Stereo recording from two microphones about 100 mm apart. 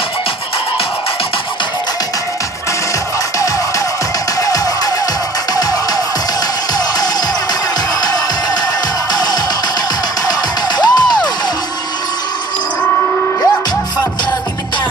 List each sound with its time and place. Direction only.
4.4 s music: 35° left (ahead or behind)
9.1 s music: 45° left (ahead or behind)
10.8 s music: 45° left (ahead or behind)